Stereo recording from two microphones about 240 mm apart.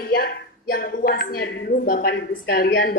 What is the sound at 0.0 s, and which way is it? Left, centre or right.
A woman's voice, left.